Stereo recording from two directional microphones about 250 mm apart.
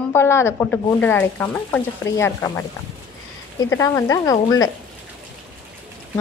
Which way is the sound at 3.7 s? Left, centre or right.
Centre.